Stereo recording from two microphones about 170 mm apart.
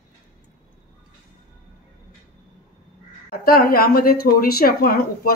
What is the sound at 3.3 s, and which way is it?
A woman's voice, 60° left (ahead or behind).